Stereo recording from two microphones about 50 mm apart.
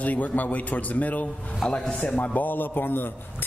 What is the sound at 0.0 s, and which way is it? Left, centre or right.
A man's voice, left.